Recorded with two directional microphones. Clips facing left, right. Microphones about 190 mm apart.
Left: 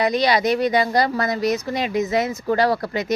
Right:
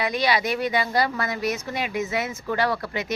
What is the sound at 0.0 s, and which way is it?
A woman's voice, 40° left (ahead or behind).